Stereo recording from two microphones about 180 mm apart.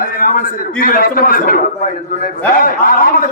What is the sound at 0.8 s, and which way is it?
A man's voice, 55° left (ahead or behind).